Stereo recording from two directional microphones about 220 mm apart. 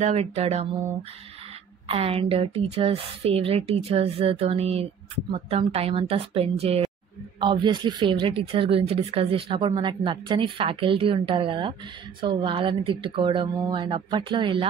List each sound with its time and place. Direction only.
0.0 s speech: 30° right (ahead or behind)
1.9 s speech: 25° right (ahead or behind)